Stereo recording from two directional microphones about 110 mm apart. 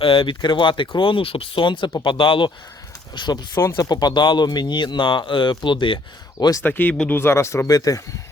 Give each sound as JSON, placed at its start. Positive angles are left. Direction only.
{"t": 0.0, "sound": "speech", "side_deg": 55}
{"t": 6.6, "sound": "speech", "side_deg": 15}